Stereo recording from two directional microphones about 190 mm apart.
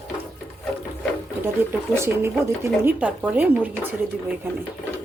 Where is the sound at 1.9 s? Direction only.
15° right (ahead or behind).